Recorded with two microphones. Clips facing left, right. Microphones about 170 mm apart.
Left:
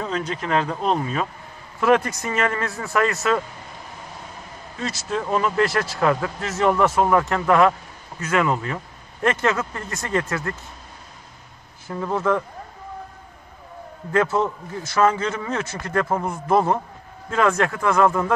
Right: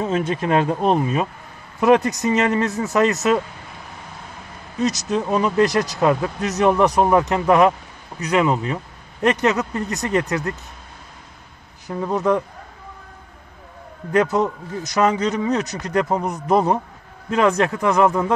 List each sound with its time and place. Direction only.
0.0 s speech: 25° right (ahead or behind)
4.7 s speech: 20° right (ahead or behind)
11.9 s speech: 20° right (ahead or behind)
14.1 s speech: 15° right (ahead or behind)